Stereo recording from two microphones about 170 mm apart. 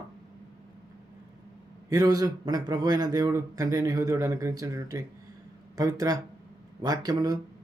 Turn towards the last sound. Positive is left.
turn(degrees=-25)  # may be behind; listen again after turning